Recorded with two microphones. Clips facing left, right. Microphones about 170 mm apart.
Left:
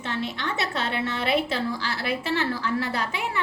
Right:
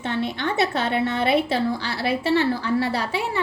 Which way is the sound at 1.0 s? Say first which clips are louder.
Right 4 dB; 35° right (ahead or behind).